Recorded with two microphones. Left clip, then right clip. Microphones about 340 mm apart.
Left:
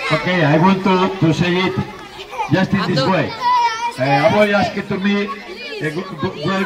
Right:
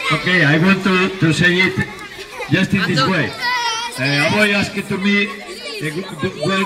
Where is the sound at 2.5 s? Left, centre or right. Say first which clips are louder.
Right 2 dB; left.